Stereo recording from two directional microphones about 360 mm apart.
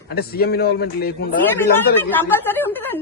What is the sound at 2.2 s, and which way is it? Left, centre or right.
Speech, centre.